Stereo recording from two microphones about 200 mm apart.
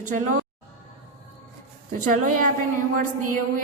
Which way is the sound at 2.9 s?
45° right (ahead or behind).